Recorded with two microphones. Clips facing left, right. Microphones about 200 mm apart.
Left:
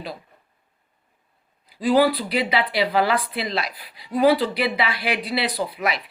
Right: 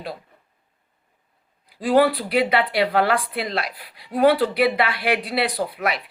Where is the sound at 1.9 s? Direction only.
55° right (ahead or behind).